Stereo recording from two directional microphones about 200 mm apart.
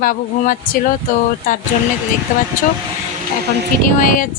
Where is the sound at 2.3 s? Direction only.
40° left (ahead or behind).